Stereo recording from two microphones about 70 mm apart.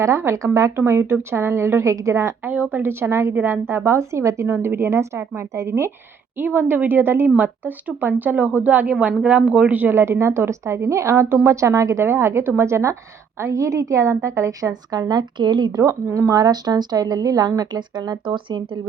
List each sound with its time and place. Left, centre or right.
0.0 s a woman's voice: right
2.5 s a woman's voice: right
6.3 s speech: right
9.9 s a woman's voice: right
14.7 s speech: right
16.1 s a woman's voice: right
17.6 s speech: right